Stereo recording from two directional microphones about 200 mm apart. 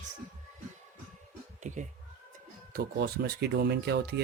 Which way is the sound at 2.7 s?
50° right (ahead or behind).